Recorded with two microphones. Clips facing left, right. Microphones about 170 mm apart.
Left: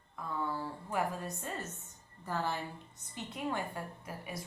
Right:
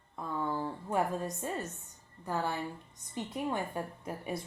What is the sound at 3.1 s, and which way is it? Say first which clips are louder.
Speech: right 3 dB; 20° right (ahead or behind).